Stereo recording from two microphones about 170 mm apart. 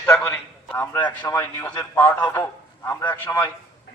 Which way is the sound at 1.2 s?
15° left (ahead or behind).